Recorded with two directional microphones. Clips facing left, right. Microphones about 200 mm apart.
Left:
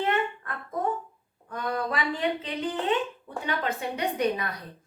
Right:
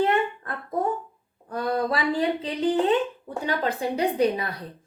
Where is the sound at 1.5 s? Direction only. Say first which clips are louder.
Right 5 dB; 35° right (ahead or behind).